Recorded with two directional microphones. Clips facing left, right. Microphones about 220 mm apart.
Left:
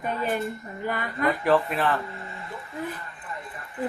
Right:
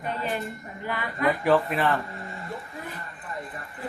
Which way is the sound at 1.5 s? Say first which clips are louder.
Even; centre (ahead or behind).